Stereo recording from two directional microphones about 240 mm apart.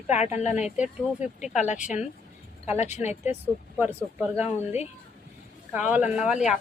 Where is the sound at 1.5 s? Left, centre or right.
Left.